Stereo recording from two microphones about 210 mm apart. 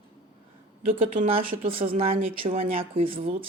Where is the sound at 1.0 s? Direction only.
30° right (ahead or behind).